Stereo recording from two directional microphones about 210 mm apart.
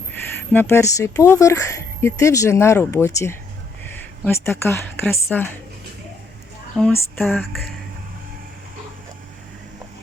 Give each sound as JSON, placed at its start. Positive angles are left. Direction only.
{"t": 0.1, "sound": "speech", "side_deg": 10}
{"t": 4.4, "sound": "speech", "side_deg": 10}
{"t": 6.7, "sound": "speech", "side_deg": 10}